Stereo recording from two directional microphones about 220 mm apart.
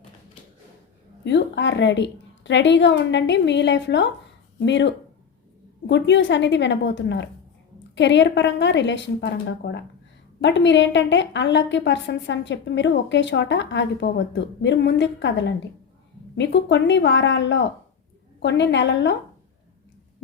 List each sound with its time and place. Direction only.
1.2 s a woman's voice: 55° left (ahead or behind)